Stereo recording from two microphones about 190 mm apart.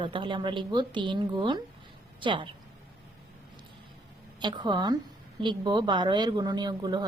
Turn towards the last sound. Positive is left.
turn(degrees=-20)  # may be behind; listen again after turning